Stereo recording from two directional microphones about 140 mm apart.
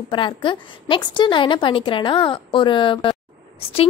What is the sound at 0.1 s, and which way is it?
A woman's voice, 35° left (ahead or behind).